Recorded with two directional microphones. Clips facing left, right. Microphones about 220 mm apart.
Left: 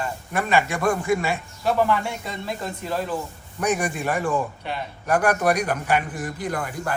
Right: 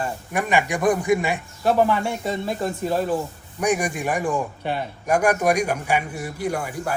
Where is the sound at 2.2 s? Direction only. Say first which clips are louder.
Right 6 dB; 25° right (ahead or behind).